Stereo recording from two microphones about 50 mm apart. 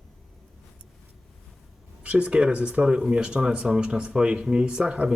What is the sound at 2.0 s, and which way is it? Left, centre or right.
A man's voice, right.